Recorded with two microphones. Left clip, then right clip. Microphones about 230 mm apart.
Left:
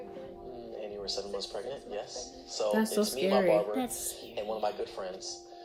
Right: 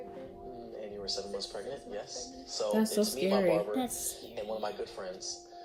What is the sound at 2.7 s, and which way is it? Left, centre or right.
Speech, centre.